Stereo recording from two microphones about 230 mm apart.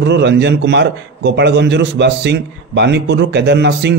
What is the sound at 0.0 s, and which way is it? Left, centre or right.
A man's voice, right.